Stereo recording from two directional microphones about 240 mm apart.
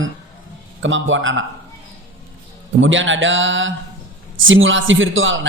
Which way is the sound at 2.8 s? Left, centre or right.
Right.